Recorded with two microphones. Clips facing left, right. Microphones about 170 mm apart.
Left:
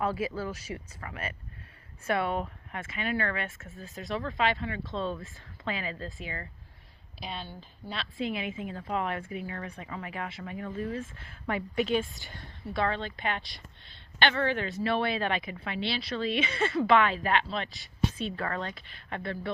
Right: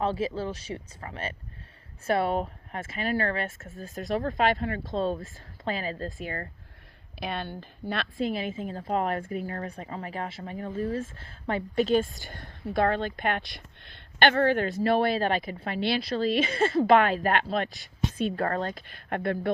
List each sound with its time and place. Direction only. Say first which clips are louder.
0.0 s speech: right 3 dB; 25° right (ahead or behind); by 6.5 s 50° right (ahead or behind)
7.2 s speech: right 6 dB; 60° right (ahead or behind)
8.2 s a woman's voice: right 2 dB; 35° right (ahead or behind); by 19.5 s 55° right (ahead or behind)